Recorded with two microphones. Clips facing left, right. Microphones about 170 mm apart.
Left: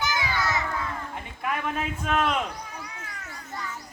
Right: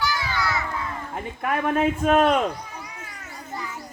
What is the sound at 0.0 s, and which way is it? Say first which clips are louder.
Children playing: right 2 dB; 20° left (ahead or behind).